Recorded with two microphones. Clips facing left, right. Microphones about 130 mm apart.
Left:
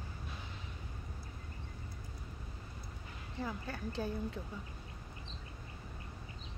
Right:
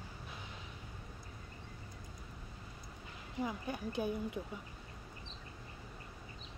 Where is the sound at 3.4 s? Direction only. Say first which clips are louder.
Right 2 dB; 15° right (ahead or behind).